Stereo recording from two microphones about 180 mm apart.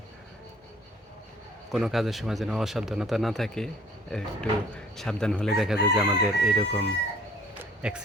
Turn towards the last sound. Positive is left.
turn(degrees=-5)  # may be behind; listen again after turning